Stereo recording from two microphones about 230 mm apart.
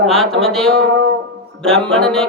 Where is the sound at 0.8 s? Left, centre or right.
Right.